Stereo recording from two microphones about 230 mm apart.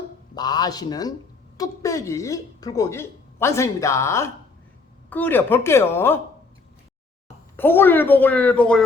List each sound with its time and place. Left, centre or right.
0.3 s speech: centre
7.5 s speech: centre